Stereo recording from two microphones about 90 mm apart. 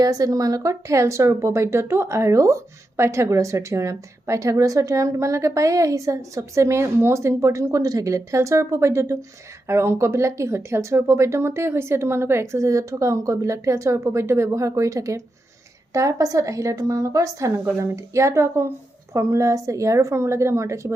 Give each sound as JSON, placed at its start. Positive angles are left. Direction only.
{"t": 0.0, "sound": "a woman's voice", "side_deg": -40}